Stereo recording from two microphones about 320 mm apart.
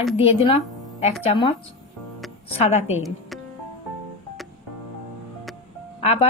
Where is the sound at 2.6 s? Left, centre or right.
Centre.